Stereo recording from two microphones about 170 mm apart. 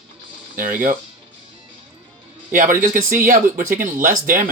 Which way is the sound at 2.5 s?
50° right (ahead or behind).